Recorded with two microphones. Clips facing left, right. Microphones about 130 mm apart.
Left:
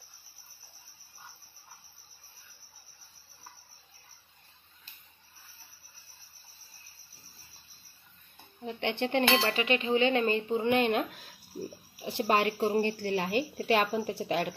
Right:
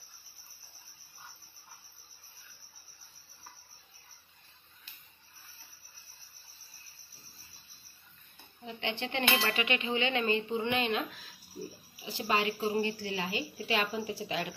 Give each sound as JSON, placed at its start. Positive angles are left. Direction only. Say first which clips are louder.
{"t": 8.6, "sound": "a woman's voice", "louder": "left 5 dB", "side_deg": 55}
{"t": 9.3, "sound": "a woman's voice", "louder": "left 4 dB", "side_deg": 30}